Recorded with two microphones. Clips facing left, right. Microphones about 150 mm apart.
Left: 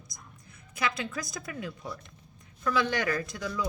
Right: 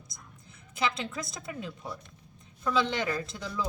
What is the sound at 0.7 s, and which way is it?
A woman's voice, 25° right (ahead or behind).